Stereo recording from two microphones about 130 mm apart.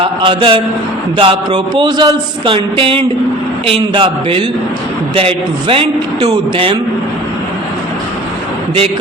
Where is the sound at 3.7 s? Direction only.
40° right (ahead or behind).